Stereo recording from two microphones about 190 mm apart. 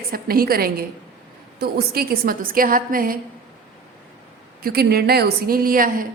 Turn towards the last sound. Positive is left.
turn(degrees=-45)  # may be behind; listen again after turning